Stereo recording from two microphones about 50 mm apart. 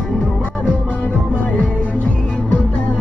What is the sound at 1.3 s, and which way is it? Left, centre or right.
Music, left.